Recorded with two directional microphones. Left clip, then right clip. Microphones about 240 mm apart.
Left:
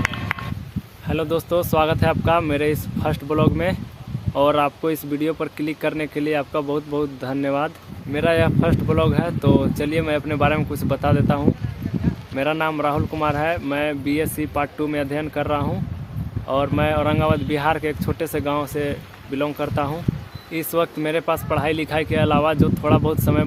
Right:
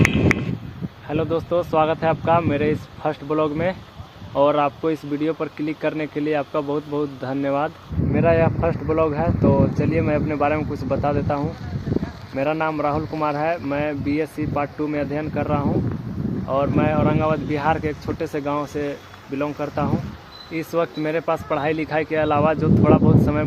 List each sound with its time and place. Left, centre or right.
1.0 s speech: left